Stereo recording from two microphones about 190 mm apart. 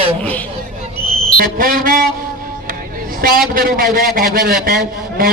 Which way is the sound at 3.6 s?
50° right (ahead or behind).